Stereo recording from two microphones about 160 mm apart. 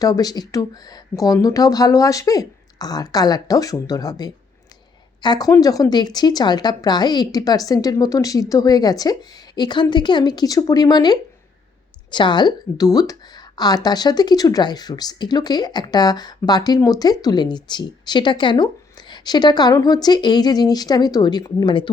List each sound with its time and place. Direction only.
0.0 s a woman's voice: 25° left (ahead or behind)